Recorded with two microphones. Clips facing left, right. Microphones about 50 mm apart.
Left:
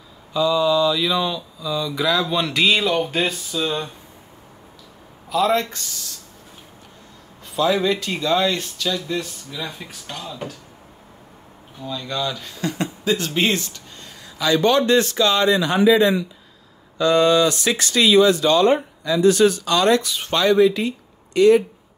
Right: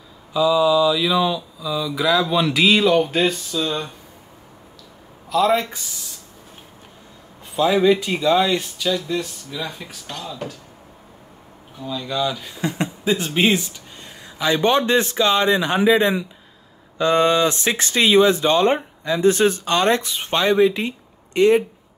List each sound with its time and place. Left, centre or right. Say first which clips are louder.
0.3 s speech: right 2 dB; centre
5.3 s speech: right 1 dB; centre
5.7 s speech: left 1 dB; centre
7.5 s speech: right 3 dB; centre
11.8 s speech: right 2 dB; centre
14.4 s speech: left 1 dB; right